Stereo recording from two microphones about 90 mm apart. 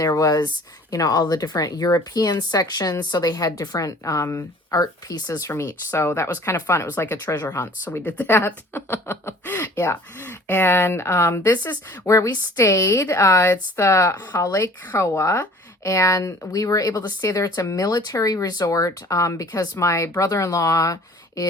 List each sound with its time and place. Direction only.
0.0 s speech: 40° left (ahead or behind)
5.9 s speech: 25° left (ahead or behind)
12.0 s speech: 35° left (ahead or behind)